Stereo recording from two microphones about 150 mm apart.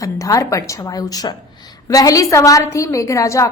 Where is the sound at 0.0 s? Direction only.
20° left (ahead or behind).